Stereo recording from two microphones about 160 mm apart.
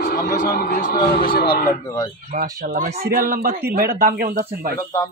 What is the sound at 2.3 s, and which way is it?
Speech, 65° right (ahead or behind).